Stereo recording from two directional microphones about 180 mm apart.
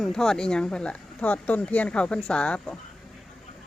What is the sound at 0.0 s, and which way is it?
Speech, 5° left (ahead or behind).